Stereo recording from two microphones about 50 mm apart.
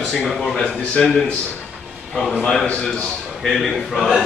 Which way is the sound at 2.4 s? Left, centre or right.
Centre.